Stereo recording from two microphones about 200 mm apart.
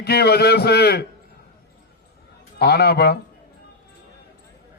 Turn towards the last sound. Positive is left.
turn(degrees=55)  # may be behind; listen again after turning